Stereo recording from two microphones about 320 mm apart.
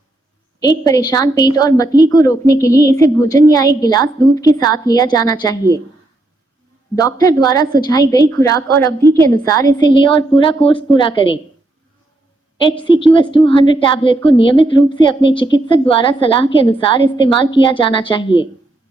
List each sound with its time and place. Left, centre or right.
0.6 s a woman's voice: centre
6.9 s a woman's voice: centre
12.8 s a woman's voice: centre